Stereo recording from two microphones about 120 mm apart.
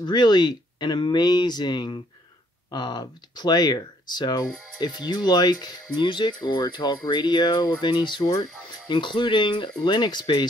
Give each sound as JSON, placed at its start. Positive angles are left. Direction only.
{"t": 0.0, "sound": "speech", "side_deg": 35}